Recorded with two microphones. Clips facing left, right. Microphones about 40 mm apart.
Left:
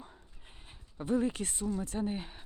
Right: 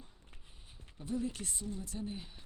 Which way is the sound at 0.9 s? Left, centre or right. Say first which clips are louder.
Left 7 dB; left.